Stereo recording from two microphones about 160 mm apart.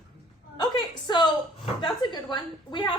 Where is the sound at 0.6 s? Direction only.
30° left (ahead or behind).